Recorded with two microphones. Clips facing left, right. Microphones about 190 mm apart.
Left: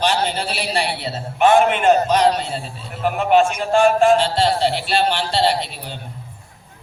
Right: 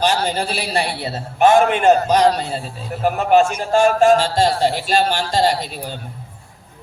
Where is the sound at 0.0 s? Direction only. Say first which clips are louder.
Right 1 dB; 40° right (ahead or behind).